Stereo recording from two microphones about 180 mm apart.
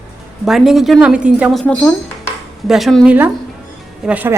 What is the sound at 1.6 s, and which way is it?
A woman's voice, 5° left (ahead or behind).